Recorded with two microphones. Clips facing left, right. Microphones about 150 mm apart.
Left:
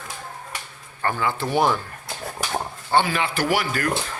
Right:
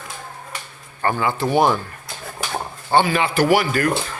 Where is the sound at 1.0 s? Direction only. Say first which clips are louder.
Right 4 dB; 10° right (ahead or behind).